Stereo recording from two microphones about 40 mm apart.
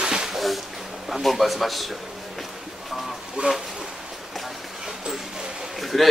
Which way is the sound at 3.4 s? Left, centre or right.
Right.